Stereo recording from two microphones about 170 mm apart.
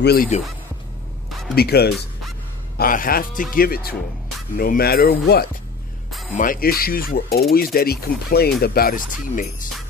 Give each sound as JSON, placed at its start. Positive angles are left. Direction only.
{"t": 0.0, "sound": "speech", "side_deg": 70}
{"t": 1.5, "sound": "speech", "side_deg": 70}
{"t": 2.8, "sound": "speech", "side_deg": 55}
{"t": 6.3, "sound": "speech", "side_deg": 55}